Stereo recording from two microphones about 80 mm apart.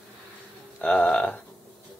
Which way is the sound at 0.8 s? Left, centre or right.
Centre.